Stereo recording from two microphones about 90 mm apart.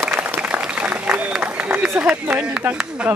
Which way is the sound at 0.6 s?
10° right (ahead or behind).